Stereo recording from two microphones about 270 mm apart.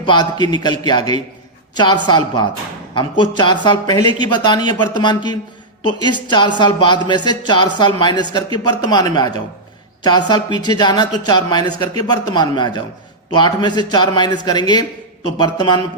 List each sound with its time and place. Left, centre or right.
0.0 s speech: centre